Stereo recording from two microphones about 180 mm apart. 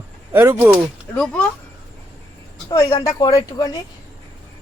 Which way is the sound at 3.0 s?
20° left (ahead or behind).